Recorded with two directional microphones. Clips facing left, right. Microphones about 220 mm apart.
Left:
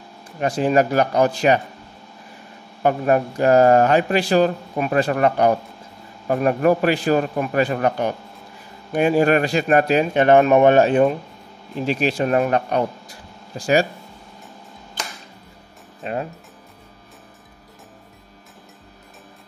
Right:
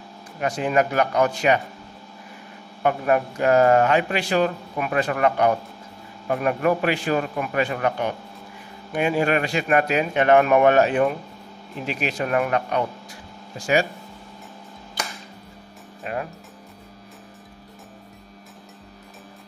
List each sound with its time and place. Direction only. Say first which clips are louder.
0.4 s speech: left 4 dB; 35° left (ahead or behind)
2.8 s speech: left 3 dB; 35° left (ahead or behind)
16.0 s music: left 3 dB; 25° left (ahead or behind)